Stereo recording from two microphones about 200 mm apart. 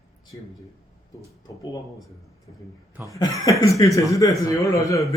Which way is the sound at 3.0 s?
15° left (ahead or behind).